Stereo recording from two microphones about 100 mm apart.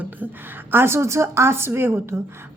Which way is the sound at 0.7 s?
25° right (ahead or behind).